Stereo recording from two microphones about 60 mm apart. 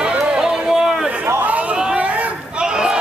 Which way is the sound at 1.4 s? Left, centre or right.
Right.